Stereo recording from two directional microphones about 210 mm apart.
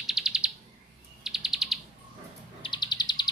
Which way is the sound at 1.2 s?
Centre (ahead or behind).